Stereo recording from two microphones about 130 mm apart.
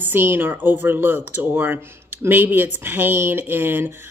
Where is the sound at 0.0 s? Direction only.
15° right (ahead or behind).